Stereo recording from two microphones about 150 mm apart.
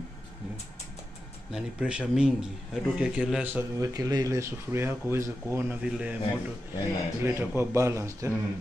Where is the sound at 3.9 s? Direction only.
25° right (ahead or behind).